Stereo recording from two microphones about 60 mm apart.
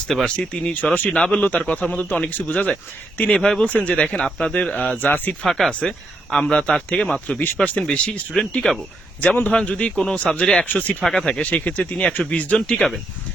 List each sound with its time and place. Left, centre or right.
0.3 s speech: centre; by 5.3 s left
5.5 s speech: centre
6.6 s speech: centre
7.3 s speech: left; by 8.8 s centre
9.2 s speech: left
9.5 s speech: centre
10.7 s speech: left
11.0 s speech: centre
11.3 s speech: left